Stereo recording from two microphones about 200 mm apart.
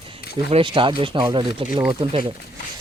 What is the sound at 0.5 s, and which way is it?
Speech, 25° right (ahead or behind).